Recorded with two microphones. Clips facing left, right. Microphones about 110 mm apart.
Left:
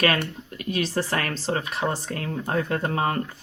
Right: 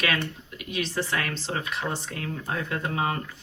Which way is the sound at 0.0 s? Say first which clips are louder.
Left 5 dB; 50° left (ahead or behind).